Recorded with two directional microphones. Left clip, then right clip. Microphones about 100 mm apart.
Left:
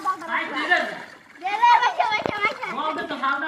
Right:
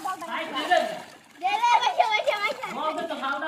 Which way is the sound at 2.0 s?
35° right (ahead or behind).